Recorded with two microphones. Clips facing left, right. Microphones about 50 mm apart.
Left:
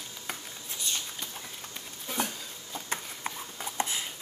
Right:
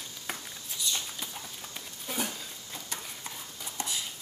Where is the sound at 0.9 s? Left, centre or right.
Left.